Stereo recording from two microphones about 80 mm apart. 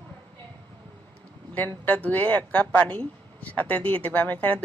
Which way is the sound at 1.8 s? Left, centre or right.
Centre.